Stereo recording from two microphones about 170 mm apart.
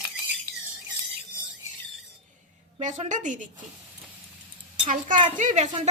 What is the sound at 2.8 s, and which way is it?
Speech, 45° right (ahead or behind).